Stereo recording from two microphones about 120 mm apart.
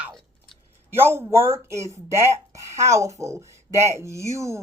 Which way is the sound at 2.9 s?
25° right (ahead or behind).